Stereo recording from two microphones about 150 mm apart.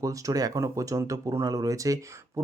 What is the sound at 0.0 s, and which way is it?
Speech, 20° right (ahead or behind).